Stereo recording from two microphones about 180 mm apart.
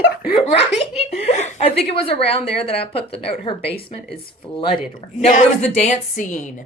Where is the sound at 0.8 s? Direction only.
35° left (ahead or behind).